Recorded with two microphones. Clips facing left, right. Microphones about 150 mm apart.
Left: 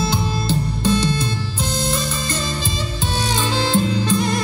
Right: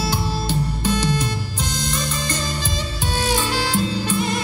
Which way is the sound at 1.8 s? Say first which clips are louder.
Left 2 dB; 30° left (ahead or behind).